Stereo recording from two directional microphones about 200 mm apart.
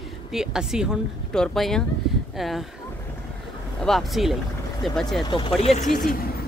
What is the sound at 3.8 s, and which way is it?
Speech, centre (ahead or behind).